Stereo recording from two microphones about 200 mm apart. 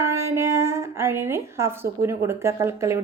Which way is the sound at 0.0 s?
15° right (ahead or behind).